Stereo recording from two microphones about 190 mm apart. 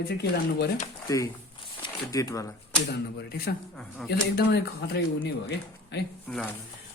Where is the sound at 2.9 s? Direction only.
55° left (ahead or behind).